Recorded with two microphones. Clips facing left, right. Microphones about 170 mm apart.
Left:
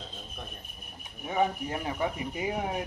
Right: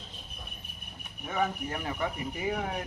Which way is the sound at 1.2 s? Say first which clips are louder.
Left 3 dB; 20° left (ahead or behind).